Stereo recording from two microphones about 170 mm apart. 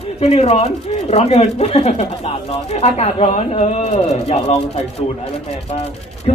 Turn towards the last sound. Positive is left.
turn(degrees=40)  # may be behind; listen again after turning